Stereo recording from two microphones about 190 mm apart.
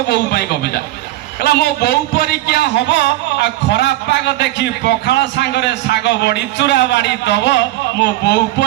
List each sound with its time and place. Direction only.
0.1 s a man's voice: 55° left (ahead or behind)